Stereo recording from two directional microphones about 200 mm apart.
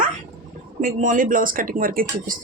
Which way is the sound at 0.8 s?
45° right (ahead or behind).